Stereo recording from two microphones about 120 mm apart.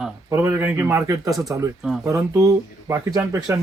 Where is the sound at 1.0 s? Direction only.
30° right (ahead or behind).